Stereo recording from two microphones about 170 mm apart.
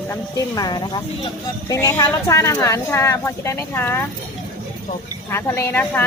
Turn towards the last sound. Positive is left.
turn(degrees=10)  # may be behind; listen again after turning